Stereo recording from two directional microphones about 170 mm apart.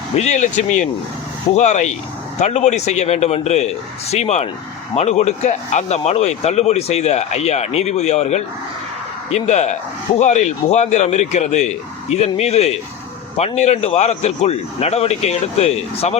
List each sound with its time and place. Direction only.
0.2 s a man's voice: 45° left (ahead or behind)